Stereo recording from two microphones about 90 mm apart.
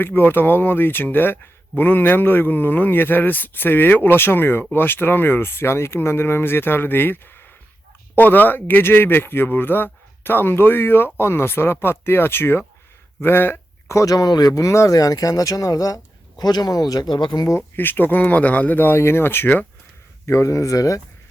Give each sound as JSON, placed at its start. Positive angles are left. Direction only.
{"t": 0.0, "sound": "speech", "side_deg": 20}
{"t": 13.2, "sound": "a sound", "side_deg": 25}
{"t": 13.9, "sound": "speech", "side_deg": 40}
{"t": 17.7, "sound": "speech", "side_deg": 20}
{"t": 20.2, "sound": "speech", "side_deg": 35}